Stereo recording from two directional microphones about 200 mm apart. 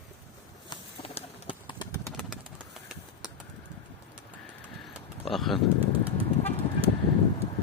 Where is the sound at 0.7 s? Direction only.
25° left (ahead or behind).